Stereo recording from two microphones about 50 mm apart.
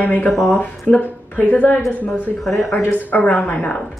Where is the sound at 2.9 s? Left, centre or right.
Left.